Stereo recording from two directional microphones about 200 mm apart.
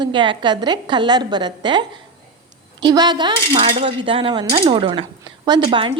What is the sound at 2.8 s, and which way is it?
Speech, 20° right (ahead or behind).